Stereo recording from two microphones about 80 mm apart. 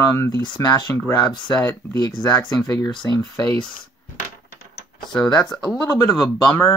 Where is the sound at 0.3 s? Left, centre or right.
Left.